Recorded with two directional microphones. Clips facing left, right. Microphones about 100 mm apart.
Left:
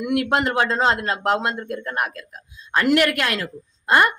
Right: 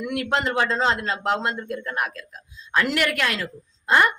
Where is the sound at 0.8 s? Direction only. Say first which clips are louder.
Left 3 dB; 55° left (ahead or behind).